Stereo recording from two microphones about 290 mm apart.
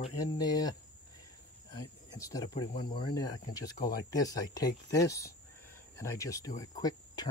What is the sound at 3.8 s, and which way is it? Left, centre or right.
Speech, left.